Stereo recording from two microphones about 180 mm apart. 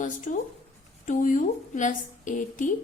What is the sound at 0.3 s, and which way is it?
A woman's voice, 45° left (ahead or behind).